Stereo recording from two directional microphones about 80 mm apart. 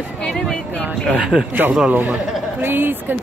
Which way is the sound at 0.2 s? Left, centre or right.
Centre.